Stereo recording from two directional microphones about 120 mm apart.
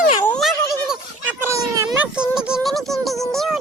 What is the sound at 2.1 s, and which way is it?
A child's voice, 5° right (ahead or behind).